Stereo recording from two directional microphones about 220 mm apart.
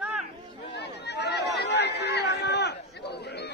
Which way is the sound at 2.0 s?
50° left (ahead or behind).